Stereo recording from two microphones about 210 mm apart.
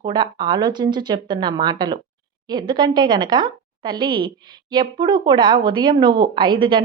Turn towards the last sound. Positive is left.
turn(degrees=-20)  # may be behind; listen again after turning